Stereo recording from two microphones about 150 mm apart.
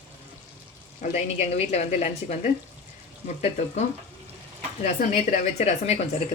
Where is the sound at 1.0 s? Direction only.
45° left (ahead or behind).